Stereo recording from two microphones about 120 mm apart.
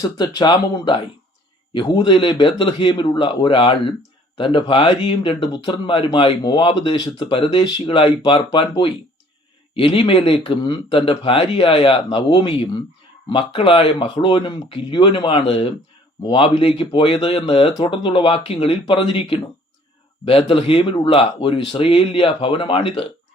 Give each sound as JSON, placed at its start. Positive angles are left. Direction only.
{"t": 0.0, "sound": "speech", "side_deg": 35}